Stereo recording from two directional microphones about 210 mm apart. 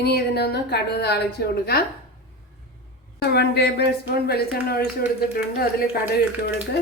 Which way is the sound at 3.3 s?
50° left (ahead or behind).